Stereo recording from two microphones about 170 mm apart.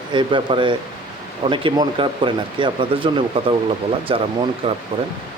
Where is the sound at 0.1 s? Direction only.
30° right (ahead or behind).